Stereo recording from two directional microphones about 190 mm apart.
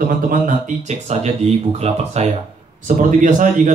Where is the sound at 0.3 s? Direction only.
40° right (ahead or behind).